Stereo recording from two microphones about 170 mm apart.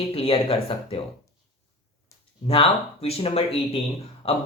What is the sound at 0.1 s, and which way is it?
Speech, 35° left (ahead or behind).